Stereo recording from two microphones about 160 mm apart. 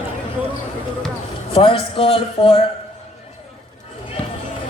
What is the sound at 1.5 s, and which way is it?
A man's voice, 35° left (ahead or behind).